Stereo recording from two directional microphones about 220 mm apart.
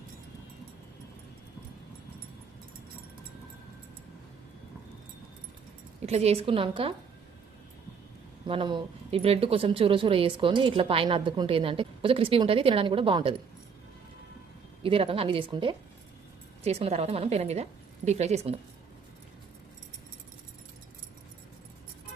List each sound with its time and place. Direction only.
6.1 s speech: 30° right (ahead or behind)
8.4 s speech: 20° right (ahead or behind)
14.8 s speech: 25° right (ahead or behind)